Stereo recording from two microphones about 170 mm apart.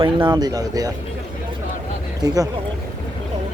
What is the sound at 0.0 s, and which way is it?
Speech, 30° right (ahead or behind).